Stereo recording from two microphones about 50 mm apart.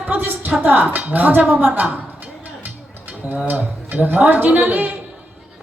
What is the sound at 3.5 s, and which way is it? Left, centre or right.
Speech, right.